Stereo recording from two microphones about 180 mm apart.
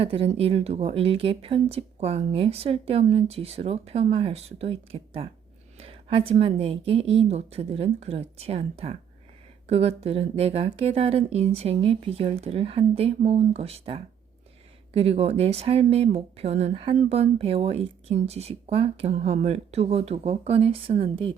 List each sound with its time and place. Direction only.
0.0 s speech: 35° right (ahead or behind)